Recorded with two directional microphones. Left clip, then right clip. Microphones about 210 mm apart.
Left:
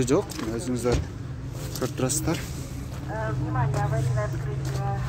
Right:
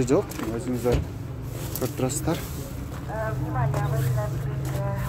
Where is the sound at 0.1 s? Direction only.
5° left (ahead or behind).